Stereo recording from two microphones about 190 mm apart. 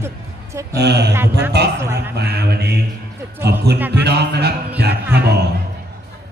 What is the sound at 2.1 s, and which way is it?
Speech, 60° right (ahead or behind).